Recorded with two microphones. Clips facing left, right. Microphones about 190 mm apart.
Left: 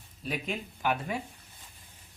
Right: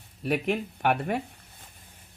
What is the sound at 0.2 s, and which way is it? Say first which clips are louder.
Speech: right 8 dB; 65° right (ahead or behind).